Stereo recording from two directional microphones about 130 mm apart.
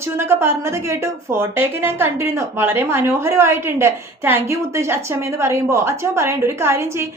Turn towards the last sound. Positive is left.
turn(degrees=-20)  # may be behind; listen again after turning